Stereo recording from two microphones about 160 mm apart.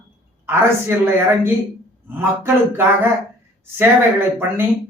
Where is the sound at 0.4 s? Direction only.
15° right (ahead or behind).